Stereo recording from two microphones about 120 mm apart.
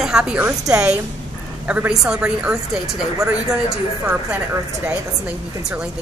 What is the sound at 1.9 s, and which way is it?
A woman's voice, 10° right (ahead or behind).